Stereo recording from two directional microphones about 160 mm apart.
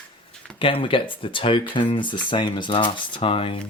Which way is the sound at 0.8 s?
30° left (ahead or behind).